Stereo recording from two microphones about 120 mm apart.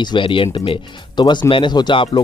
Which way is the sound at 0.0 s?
40° left (ahead or behind).